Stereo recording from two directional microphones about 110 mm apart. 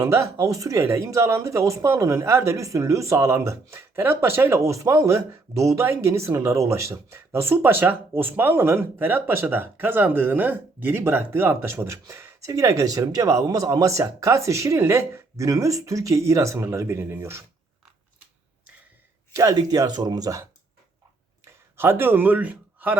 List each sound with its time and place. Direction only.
0.0 s speech: 25° right (ahead or behind)
19.3 s speech: 30° right (ahead or behind); by 23.0 s 15° right (ahead or behind)